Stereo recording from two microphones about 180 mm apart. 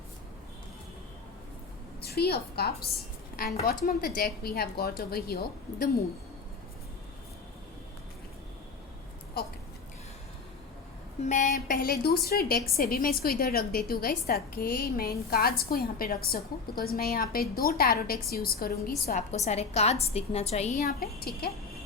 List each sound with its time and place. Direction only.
2.0 s a woman's voice: 60° left (ahead or behind)
9.4 s a sound: 60° left (ahead or behind)
11.2 s a woman's voice: 40° left (ahead or behind)
11.4 s a woman's voice: 55° left (ahead or behind)
19.3 s a woman's voice: 35° left (ahead or behind)
20.8 s a woman's voice: 60° left (ahead or behind)